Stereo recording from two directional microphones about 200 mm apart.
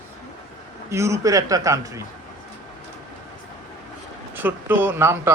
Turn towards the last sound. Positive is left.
turn(degrees=-15)  # may be behind; listen again after turning